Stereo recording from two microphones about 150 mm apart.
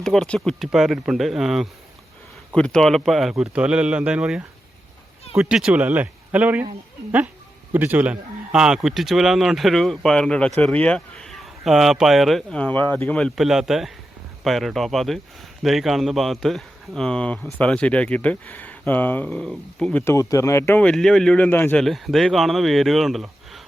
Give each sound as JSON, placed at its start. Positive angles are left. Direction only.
{"t": 0.0, "sound": "speech", "side_deg": 5}
{"t": 7.7, "sound": "speech", "side_deg": -10}